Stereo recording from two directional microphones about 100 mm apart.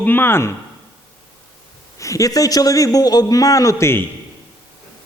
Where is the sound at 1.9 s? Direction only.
35° left (ahead or behind).